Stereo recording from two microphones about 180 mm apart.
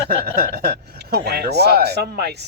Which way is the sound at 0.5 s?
65° right (ahead or behind).